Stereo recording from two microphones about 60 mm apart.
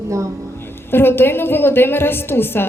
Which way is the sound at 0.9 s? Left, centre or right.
Left.